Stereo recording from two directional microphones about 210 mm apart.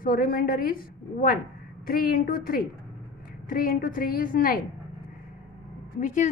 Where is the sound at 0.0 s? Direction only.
45° left (ahead or behind).